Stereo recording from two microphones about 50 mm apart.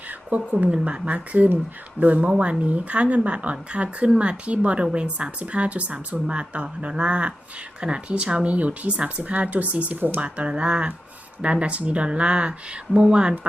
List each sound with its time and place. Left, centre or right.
0.1 s speech: right; by 13.3 s centre